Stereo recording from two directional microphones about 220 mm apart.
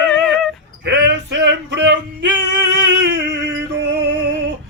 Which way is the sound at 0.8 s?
50° right (ahead or behind).